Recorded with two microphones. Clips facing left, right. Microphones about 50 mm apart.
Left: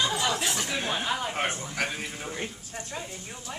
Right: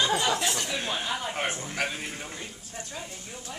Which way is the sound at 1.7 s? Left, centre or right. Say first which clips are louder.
Even; centre.